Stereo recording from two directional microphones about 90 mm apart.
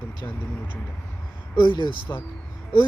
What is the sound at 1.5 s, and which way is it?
Speech, 60° left (ahead or behind).